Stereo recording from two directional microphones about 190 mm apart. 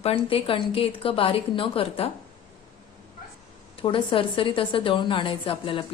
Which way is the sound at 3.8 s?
25° left (ahead or behind).